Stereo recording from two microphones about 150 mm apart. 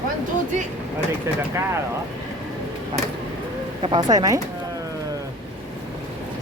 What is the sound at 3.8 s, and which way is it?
Speech, 30° right (ahead or behind).